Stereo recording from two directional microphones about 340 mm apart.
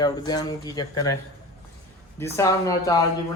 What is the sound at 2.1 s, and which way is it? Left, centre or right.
Speech, centre.